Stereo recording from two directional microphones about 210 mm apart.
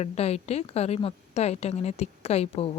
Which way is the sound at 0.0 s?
30° left (ahead or behind).